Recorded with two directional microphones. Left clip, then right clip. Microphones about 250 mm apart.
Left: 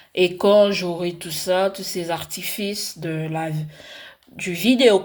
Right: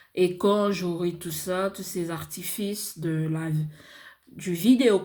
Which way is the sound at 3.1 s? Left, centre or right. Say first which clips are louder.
Left 4 dB; left.